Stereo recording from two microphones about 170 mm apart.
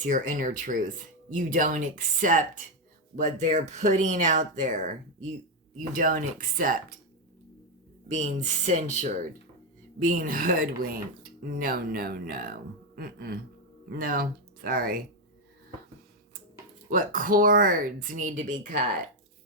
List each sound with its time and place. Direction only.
0.0 s speech: 50° right (ahead or behind)
5.9 s speech: 55° right (ahead or behind)
8.0 s speech: 45° right (ahead or behind)
16.9 s speech: 55° right (ahead or behind)